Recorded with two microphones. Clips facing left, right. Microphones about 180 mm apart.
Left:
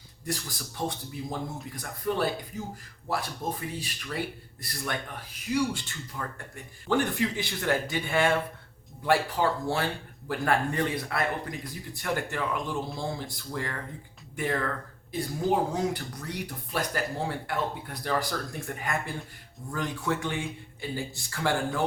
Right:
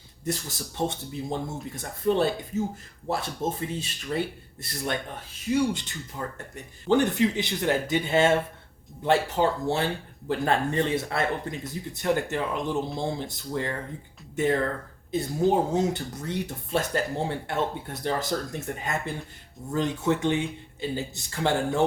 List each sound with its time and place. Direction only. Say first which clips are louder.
0.3 s speech: right 4 dB; 25° right (ahead or behind)